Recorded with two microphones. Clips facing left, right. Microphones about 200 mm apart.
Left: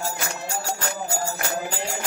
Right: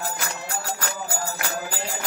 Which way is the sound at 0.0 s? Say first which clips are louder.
Left 1 dB; 25° left (ahead or behind).